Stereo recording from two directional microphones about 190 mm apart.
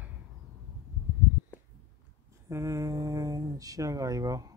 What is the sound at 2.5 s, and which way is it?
Speech, 15° right (ahead or behind).